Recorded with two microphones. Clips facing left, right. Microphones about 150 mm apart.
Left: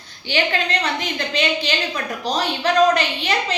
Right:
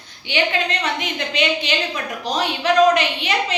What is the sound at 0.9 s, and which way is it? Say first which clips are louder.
Speech: even; 35° left (ahead or behind).